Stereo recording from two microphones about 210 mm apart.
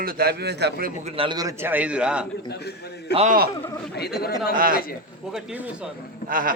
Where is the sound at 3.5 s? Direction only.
15° left (ahead or behind).